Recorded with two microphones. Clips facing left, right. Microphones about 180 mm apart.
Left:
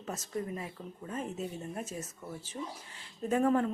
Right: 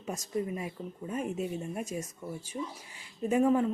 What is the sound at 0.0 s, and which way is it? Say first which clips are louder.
Speech: right 3 dB; 15° right (ahead or behind).